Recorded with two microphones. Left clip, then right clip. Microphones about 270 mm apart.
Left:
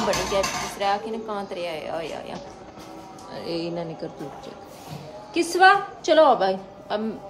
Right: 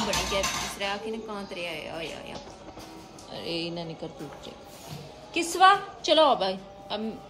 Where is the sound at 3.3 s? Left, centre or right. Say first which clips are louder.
Left 4 dB; centre.